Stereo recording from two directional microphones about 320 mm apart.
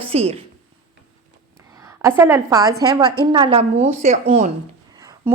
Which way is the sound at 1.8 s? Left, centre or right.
Centre.